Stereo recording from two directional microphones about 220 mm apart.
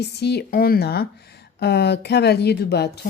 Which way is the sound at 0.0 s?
50° left (ahead or behind).